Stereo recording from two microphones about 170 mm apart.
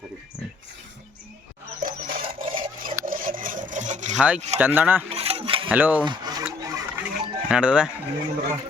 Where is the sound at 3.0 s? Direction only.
55° right (ahead or behind).